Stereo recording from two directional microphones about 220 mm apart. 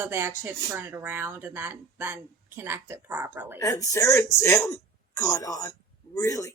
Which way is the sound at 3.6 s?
15° left (ahead or behind).